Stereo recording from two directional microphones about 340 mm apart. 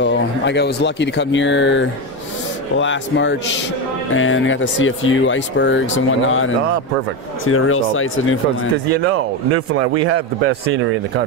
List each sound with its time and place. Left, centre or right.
0.0 s speech: left
9.5 s a man's voice: right